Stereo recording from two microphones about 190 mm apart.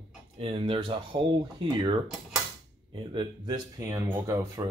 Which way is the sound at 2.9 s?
25° right (ahead or behind).